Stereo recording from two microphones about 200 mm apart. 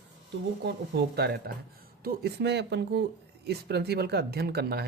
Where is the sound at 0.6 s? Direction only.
55° right (ahead or behind).